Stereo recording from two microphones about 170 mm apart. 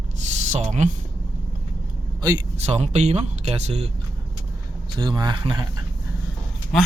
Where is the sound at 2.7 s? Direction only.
40° right (ahead or behind).